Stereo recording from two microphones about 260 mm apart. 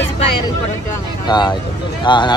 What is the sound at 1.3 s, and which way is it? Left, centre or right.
Speech, centre.